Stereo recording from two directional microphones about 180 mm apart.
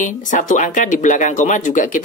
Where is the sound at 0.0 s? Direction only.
45° left (ahead or behind).